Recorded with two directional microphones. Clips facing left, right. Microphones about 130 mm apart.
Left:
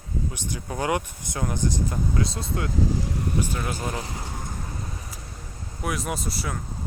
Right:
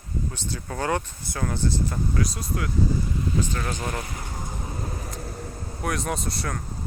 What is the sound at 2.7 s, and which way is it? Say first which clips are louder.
Speech: right 1 dB; 85° left.